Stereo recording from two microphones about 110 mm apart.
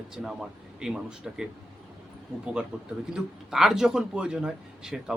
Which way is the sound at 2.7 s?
10° right (ahead or behind).